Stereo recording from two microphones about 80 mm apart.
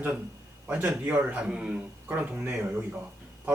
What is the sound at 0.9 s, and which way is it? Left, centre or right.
A man's voice, centre.